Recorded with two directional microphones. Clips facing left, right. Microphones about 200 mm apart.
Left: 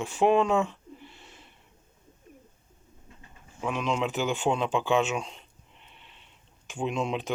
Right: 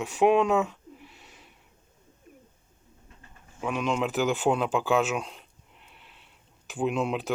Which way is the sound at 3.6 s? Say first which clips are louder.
Right 1 dB; centre (ahead or behind).